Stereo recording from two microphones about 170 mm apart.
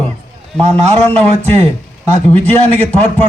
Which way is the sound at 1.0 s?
10° left (ahead or behind).